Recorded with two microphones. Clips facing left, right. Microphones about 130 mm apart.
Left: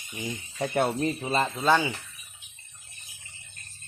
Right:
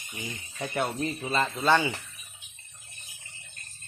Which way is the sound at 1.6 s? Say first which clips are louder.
Even; 10° left (ahead or behind).